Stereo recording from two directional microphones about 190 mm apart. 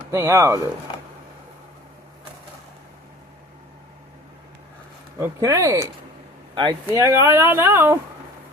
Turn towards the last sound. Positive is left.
turn(degrees=-15)  # may be behind; listen again after turning